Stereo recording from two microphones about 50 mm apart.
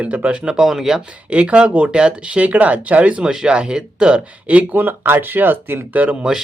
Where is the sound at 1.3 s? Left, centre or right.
Right.